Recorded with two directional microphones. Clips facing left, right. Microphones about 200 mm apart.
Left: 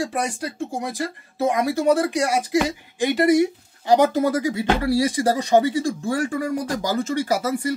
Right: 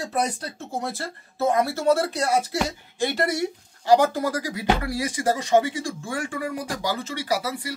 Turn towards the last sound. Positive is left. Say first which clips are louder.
# left 5 dB
turn(degrees=45)  # may be behind; listen again after turning